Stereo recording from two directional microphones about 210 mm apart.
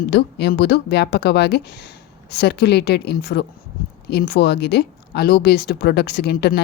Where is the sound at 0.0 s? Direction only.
50° left (ahead or behind).